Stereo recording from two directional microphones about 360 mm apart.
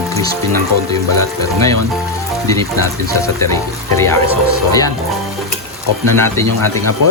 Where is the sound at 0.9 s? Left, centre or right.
Centre.